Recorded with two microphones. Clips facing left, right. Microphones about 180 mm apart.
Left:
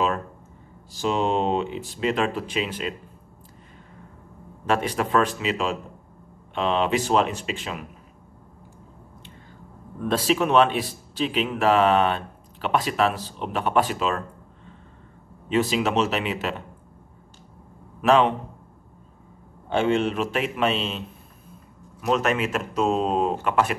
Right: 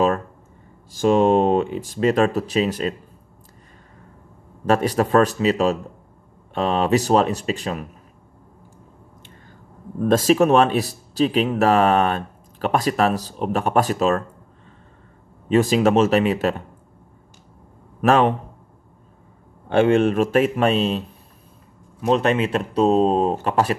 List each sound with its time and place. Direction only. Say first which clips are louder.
0.9 s speech: right 8 dB; 50° right (ahead or behind)
4.6 s speech: right 5 dB; 40° right (ahead or behind)
9.9 s speech: right 7 dB; 45° right (ahead or behind)
15.4 s speech: right 6 dB; 45° right (ahead or behind)
18.0 s speech: right 2 dB; 50° right (ahead or behind)
19.7 s speech: right 6 dB; 55° right (ahead or behind)
22.0 s speech: right 4 dB; 30° right (ahead or behind)